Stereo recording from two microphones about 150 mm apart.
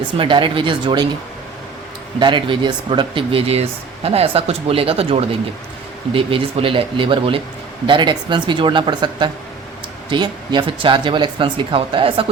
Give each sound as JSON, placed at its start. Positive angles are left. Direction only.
{"t": 0.2, "sound": "speech", "side_deg": -35}
{"t": 2.1, "sound": "speech", "side_deg": -30}